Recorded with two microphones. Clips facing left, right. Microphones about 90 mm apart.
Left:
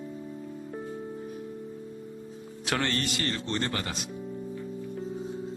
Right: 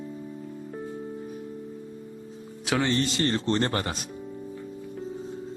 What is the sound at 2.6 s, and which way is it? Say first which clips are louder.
Music: right 3 dB; centre (ahead or behind).